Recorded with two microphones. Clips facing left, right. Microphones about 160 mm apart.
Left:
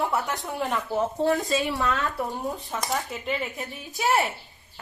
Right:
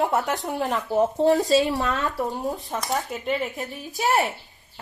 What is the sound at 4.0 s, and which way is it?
Speech, 20° right (ahead or behind).